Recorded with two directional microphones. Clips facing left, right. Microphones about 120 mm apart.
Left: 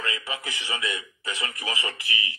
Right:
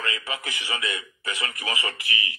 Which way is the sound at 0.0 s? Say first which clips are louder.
Right 1 dB; 25° left (ahead or behind).